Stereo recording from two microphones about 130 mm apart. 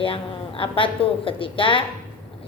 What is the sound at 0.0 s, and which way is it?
A woman's voice, 45° left (ahead or behind).